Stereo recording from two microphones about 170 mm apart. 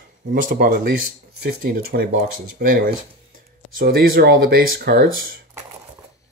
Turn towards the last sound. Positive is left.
turn(degrees=-60)  # may be behind; listen again after turning